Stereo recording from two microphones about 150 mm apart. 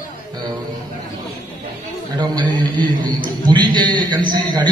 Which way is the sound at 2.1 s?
30° right (ahead or behind).